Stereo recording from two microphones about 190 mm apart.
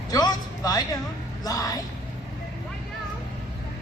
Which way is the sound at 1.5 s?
20° left (ahead or behind).